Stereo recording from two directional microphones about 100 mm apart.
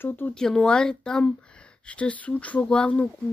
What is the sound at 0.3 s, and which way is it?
Speech, 5° left (ahead or behind).